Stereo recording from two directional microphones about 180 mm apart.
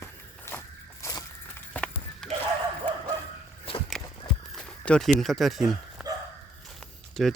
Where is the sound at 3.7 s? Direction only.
30° left (ahead or behind).